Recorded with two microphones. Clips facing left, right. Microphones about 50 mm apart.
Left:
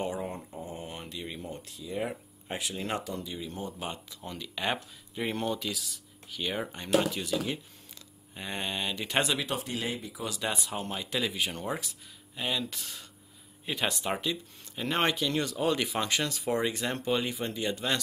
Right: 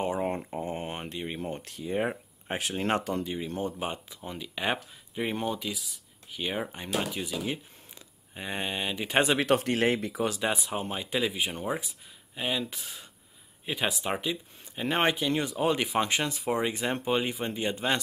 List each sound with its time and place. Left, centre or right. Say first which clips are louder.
0.2 s mantra: right 6 dB; right
0.8 s mantra: right 4 dB; right
1.4 s speech: right 5 dB; right
3.8 s speech: right 3 dB; right
9.4 s speech: right 8 dB; right
10.2 s speech: right 4 dB; right
10.5 s speech: right 3 dB; right
13.7 s speech: right 1 dB; centre; by 18.0 s right